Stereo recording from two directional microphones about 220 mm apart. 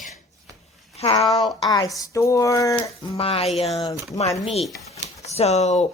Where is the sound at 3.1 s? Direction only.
25° left (ahead or behind).